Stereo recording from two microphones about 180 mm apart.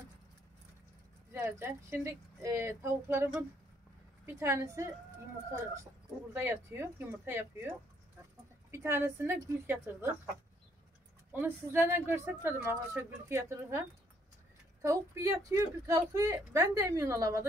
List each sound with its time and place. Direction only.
1.3 s a woman's voice: 15° right (ahead or behind)
4.3 s a woman's voice: 15° right (ahead or behind)
6.3 s a woman's voice: 10° right (ahead or behind)
8.7 s a woman's voice: 15° right (ahead or behind)
11.3 s a woman's voice: 10° right (ahead or behind)